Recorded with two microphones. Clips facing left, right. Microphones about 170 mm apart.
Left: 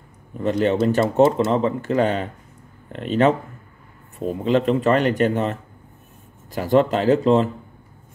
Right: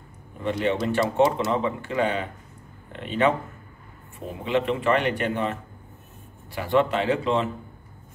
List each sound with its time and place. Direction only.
0.4 s speech: 40° left (ahead or behind)
4.5 s speech: 40° left (ahead or behind)